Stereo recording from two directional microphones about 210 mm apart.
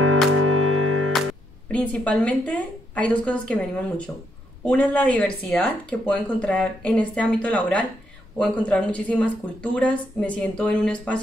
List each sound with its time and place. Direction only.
0.4 s music: 90° right
1.7 s speech: 5° left (ahead or behind)
4.6 s speech: 5° left (ahead or behind)